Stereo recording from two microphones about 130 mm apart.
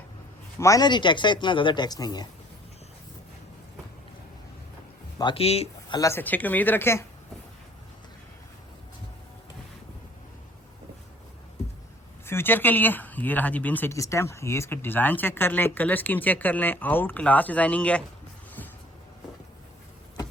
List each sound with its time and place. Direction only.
0.6 s speech: 30° left (ahead or behind)
5.3 s speech: 50° left (ahead or behind)
5.9 s speech: 25° left (ahead or behind)
12.2 s speech: 20° left (ahead or behind)
13.9 s speech: 25° left (ahead or behind)